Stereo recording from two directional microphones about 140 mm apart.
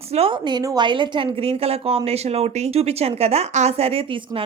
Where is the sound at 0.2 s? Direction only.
35° right (ahead or behind).